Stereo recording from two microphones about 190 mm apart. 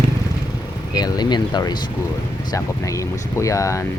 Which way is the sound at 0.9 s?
20° left (ahead or behind).